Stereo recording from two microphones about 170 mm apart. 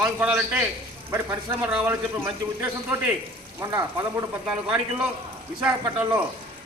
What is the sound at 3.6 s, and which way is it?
A man's voice, 20° right (ahead or behind).